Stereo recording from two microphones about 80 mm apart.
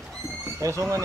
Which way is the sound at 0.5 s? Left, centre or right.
Right.